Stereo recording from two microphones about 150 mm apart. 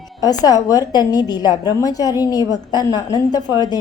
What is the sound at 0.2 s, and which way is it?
A woman's voice, 25° left (ahead or behind).